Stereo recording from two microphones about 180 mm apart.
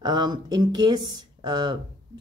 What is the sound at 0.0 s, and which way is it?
Speech, 25° right (ahead or behind).